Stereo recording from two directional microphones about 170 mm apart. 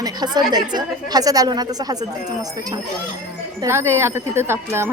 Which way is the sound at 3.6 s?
15° right (ahead or behind).